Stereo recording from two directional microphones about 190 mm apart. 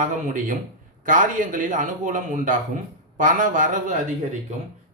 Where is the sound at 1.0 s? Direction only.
45° right (ahead or behind).